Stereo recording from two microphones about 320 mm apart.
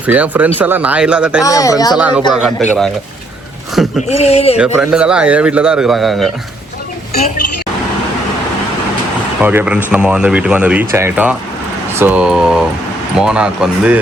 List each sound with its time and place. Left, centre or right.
0.0 s speech: centre
1.5 s speech: centre
2.0 s speech: centre
4.1 s speech: centre
4.5 s speech: centre
7.1 s speech: left
9.4 s speech: centre